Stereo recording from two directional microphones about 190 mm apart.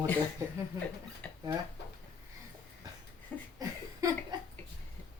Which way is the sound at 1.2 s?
10° left (ahead or behind).